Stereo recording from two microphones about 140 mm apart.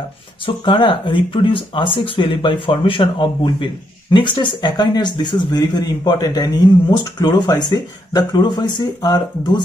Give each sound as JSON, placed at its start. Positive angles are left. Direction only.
{"t": 0.7, "sound": "speech", "side_deg": 35}